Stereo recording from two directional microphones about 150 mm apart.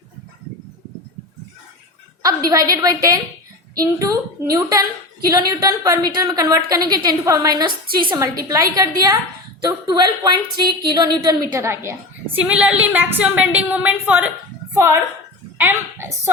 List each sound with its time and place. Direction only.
2.5 s a woman's voice: 25° right (ahead or behind)